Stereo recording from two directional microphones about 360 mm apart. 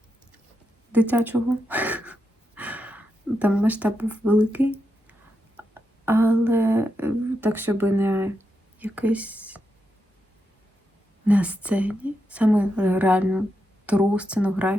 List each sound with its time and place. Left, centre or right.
0.9 s speech: centre
11.3 s speech: centre